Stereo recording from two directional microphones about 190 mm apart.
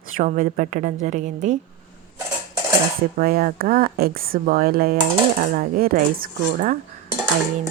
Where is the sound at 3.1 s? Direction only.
50° right (ahead or behind).